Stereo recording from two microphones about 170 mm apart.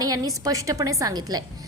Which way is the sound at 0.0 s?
20° right (ahead or behind).